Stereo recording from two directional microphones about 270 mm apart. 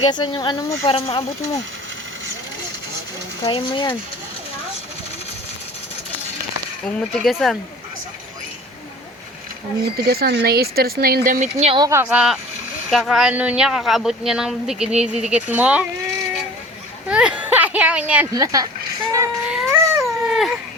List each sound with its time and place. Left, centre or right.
0.0 s speech: centre
3.4 s speech: centre
6.8 s speech: centre
10.1 s speech: right
11.6 s a woman's voice: centre
17.1 s speech: centre
19.1 s baby cry: centre